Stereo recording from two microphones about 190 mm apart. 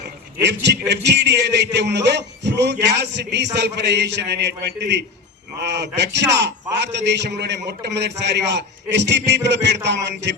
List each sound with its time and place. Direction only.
0.4 s a man's voice: 65° right (ahead or behind)